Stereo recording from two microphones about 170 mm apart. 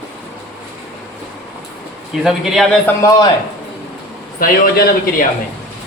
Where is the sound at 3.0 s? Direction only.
20° left (ahead or behind).